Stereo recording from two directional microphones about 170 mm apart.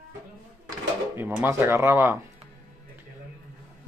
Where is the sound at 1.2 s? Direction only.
10° right (ahead or behind).